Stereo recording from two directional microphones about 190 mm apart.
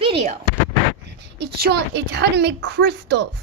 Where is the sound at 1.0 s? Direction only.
65° right (ahead or behind).